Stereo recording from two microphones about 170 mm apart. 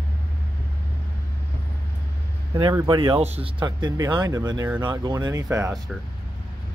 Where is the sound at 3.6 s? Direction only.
25° right (ahead or behind).